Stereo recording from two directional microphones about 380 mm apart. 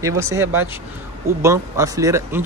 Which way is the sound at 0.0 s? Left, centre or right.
Centre.